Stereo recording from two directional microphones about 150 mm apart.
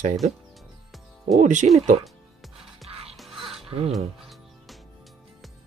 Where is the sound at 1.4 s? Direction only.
55° right (ahead or behind).